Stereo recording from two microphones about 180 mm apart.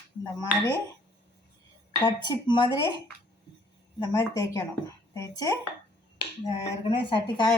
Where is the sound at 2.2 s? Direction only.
25° left (ahead or behind).